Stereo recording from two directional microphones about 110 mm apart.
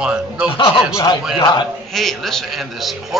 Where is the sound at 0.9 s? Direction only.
40° left (ahead or behind).